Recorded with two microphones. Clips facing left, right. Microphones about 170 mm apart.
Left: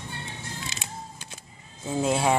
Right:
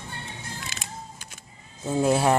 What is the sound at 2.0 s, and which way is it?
Speech, 5° right (ahead or behind).